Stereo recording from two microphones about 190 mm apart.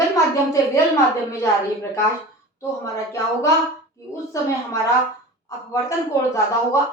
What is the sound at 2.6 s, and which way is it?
Speech, 15° left (ahead or behind).